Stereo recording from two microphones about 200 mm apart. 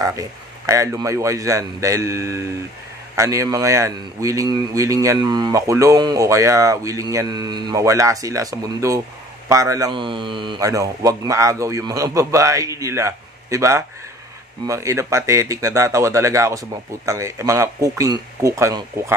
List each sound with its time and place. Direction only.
0.0 s a man's voice: 15° right (ahead or behind)